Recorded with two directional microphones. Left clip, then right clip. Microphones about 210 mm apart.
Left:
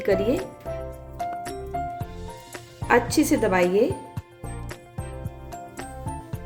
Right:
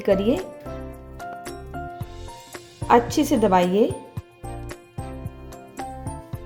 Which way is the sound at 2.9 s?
20° right (ahead or behind).